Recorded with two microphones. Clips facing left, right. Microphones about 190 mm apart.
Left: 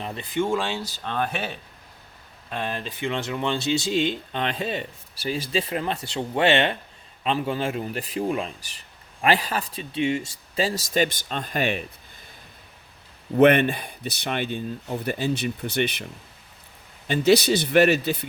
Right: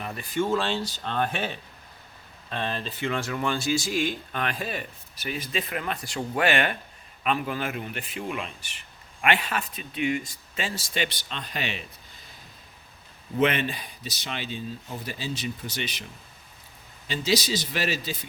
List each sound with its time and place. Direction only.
0.0 s speech: 25° left (ahead or behind); by 11.8 s 50° left (ahead or behind)
13.3 s speech: 55° left (ahead or behind)
17.1 s speech: 60° left (ahead or behind)